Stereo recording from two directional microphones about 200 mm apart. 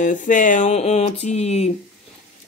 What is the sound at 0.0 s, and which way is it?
A woman's voice, 40° left (ahead or behind).